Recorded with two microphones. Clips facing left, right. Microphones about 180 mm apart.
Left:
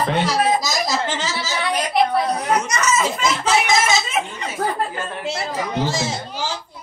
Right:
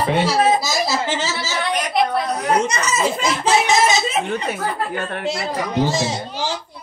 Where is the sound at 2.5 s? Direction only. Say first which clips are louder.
Right 3 dB; 30° right (ahead or behind).